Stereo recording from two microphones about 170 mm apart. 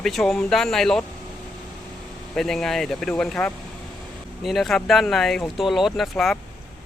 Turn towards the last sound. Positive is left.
turn(degrees=0)  # may be behind; listen again after turning